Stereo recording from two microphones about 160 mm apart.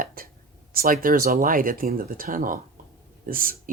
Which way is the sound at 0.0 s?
60° right (ahead or behind).